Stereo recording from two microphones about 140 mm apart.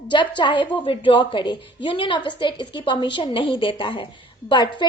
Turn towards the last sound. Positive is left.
turn(degrees=35)  # may be behind; listen again after turning